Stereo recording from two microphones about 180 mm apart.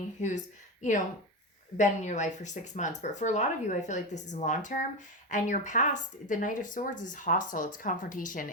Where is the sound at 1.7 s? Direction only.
40° left (ahead or behind).